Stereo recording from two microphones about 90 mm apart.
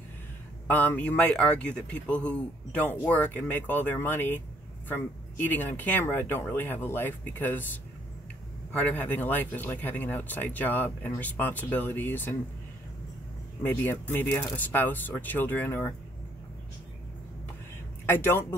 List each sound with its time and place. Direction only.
0.7 s speech: 20° left (ahead or behind)
13.6 s speech: 20° left (ahead or behind)
18.0 s speech: 25° left (ahead or behind)